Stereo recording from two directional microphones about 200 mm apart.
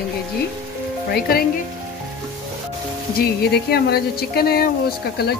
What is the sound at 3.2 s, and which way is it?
Speech, 50° left (ahead or behind).